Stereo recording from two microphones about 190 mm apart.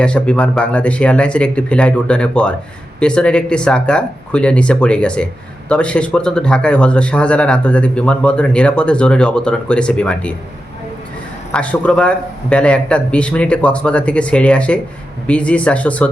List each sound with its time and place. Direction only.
0.0 s speech: 5° left (ahead or behind)
11.5 s a man's voice: 5° left (ahead or behind)